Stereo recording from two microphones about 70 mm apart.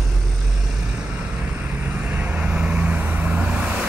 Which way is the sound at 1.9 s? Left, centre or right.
Right.